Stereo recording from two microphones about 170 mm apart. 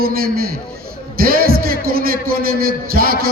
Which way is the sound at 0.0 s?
60° right (ahead or behind).